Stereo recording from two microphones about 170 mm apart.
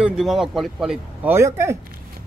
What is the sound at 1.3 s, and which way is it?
Speech, 15° right (ahead or behind).